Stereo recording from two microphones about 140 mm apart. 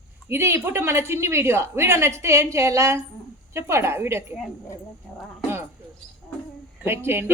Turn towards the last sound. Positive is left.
turn(degrees=-15)  # may be behind; listen again after turning